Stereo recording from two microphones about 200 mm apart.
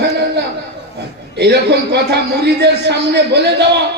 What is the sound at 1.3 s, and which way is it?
A man's voice, 55° right (ahead or behind).